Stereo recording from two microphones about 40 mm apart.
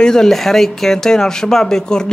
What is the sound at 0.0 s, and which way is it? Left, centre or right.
Speech, centre.